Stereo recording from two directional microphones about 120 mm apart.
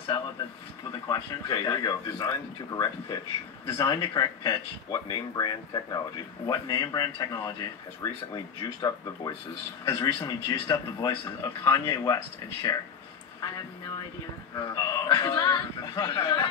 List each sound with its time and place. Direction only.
1.0 s speech: 35° left (ahead or behind)
14.5 s speech: 30° left (ahead or behind)